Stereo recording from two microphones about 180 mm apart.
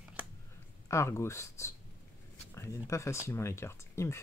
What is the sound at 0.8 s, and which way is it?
Speech, 15° left (ahead or behind).